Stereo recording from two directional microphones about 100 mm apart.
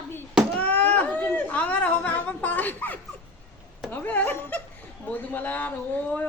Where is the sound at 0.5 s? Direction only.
15° left (ahead or behind).